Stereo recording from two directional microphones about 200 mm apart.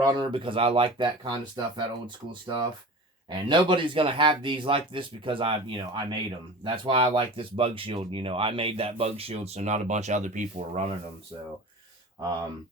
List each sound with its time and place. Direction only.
0.0 s speech: 20° right (ahead or behind)